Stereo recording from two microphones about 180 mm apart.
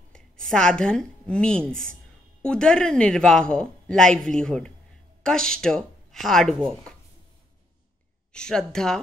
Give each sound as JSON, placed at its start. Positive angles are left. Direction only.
{"t": 0.1, "sound": "a woman's voice", "side_deg": 5}
{"t": 8.3, "sound": "a woman's voice", "side_deg": 5}